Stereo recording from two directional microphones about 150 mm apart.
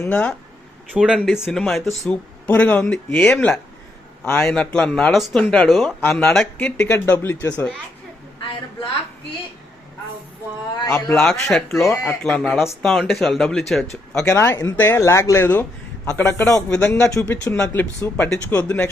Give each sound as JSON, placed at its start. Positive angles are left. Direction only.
{"t": 0.0, "sound": "speech", "side_deg": 10}
{"t": 0.9, "sound": "speech", "side_deg": -5}
{"t": 10.8, "sound": "speech", "side_deg": 25}
{"t": 11.1, "sound": "speech", "side_deg": 5}
{"t": 14.3, "sound": "speech", "side_deg": 15}